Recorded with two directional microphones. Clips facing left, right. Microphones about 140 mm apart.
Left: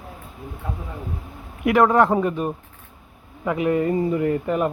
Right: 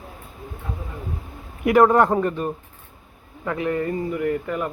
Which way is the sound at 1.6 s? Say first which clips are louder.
Right 1 dB; centre (ahead or behind).